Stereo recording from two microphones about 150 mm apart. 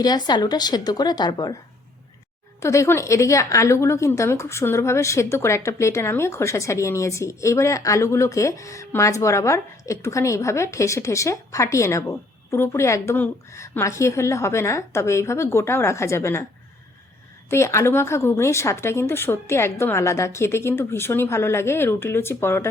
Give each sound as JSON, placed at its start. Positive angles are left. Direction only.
{"t": 0.0, "sound": "a woman's voice", "side_deg": 30}
{"t": 2.6, "sound": "a woman's voice", "side_deg": 20}
{"t": 17.5, "sound": "a woman's voice", "side_deg": 20}